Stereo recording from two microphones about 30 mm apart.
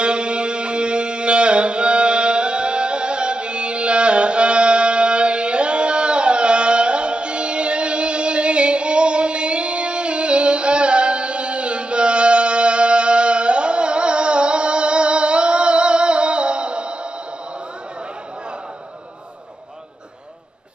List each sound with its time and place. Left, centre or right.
0.0 s music: right